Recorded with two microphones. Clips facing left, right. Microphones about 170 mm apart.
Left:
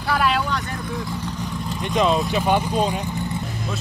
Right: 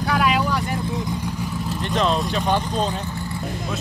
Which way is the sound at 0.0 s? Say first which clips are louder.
Right 1 dB; centre (ahead or behind).